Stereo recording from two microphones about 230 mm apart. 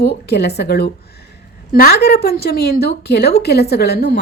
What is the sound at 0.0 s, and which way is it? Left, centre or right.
A woman's voice, left.